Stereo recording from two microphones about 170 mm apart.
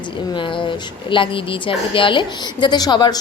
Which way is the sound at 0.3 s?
30° left (ahead or behind).